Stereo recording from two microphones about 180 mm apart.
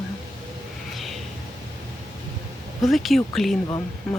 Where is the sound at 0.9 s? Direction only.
Centre (ahead or behind).